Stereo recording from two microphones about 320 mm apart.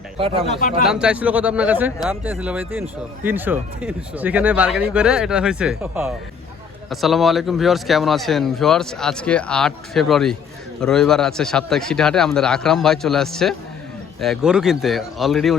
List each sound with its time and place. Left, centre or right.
0.2 s speech: centre
0.9 s speech: centre